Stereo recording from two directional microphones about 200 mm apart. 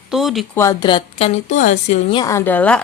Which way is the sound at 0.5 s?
15° left (ahead or behind).